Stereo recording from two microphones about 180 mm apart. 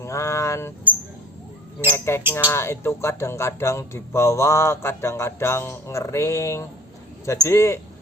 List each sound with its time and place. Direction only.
0.0 s keys jangling: 15° left (ahead or behind)
1.9 s speech: 15° left (ahead or behind)